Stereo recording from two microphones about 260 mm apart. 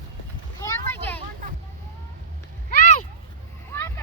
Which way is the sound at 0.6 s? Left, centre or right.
Centre.